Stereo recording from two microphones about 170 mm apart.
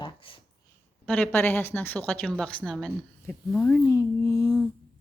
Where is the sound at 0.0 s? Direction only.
30° left (ahead or behind).